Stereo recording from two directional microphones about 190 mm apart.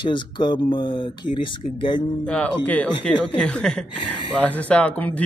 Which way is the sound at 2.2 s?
5° left (ahead or behind).